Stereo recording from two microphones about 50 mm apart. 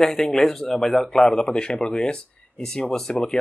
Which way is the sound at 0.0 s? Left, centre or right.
Centre.